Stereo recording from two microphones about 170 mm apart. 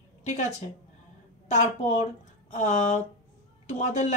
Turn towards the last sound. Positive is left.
turn(degrees=45)  # may be behind; listen again after turning